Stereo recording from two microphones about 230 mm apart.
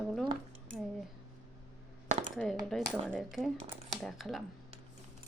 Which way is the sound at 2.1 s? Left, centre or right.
Right.